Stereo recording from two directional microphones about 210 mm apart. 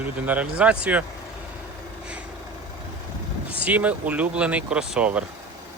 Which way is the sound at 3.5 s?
5° right (ahead or behind).